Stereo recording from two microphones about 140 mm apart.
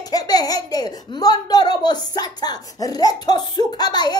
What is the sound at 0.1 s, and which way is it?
Speech, 25° left (ahead or behind).